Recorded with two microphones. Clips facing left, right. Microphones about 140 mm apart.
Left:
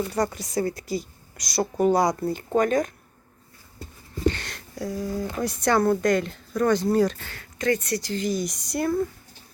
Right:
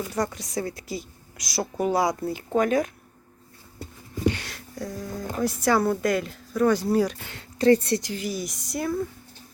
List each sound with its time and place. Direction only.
0.1 s a woman's voice: centre (ahead or behind)
3.8 s a sound: 10° right (ahead or behind)
5.4 s a woman's voice: centre (ahead or behind)
7.3 s speech: 30° right (ahead or behind)
8.0 s a woman's voice: 5° right (ahead or behind)